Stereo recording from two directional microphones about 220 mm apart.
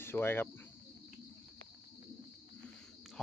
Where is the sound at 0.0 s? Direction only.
10° left (ahead or behind).